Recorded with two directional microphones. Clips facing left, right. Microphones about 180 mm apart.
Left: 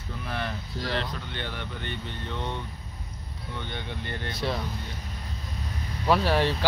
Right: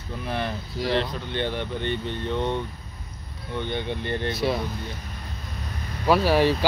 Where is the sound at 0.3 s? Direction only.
20° right (ahead or behind).